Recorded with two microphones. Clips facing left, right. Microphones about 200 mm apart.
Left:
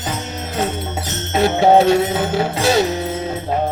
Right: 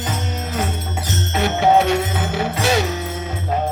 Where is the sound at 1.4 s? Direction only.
35° left (ahead or behind).